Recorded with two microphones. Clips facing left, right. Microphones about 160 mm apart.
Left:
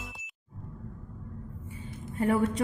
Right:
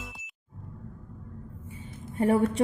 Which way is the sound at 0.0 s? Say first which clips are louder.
Right 1 dB; centre (ahead or behind).